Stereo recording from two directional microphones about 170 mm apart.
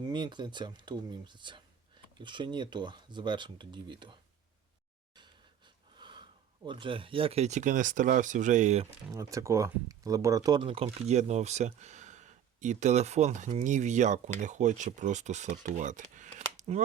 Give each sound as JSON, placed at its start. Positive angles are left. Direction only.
{"t": 0.1, "sound": "speech", "side_deg": -25}
{"t": 6.0, "sound": "a sound", "side_deg": -25}
{"t": 6.7, "sound": "speech", "side_deg": -30}
{"t": 9.1, "sound": "speech", "side_deg": -20}